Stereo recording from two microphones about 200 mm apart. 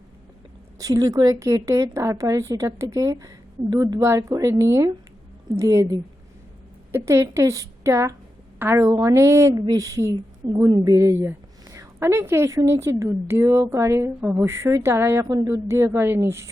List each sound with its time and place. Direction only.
0.8 s a woman's voice: 15° right (ahead or behind)